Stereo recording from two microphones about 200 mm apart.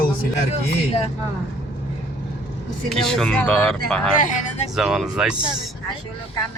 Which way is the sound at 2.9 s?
Centre (ahead or behind).